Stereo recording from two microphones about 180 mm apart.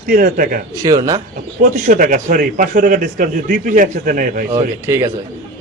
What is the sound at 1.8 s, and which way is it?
A man's voice, 50° right (ahead or behind).